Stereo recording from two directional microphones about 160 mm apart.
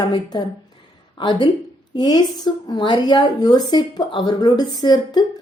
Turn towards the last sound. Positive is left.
turn(degrees=25)  # may be behind; listen again after turning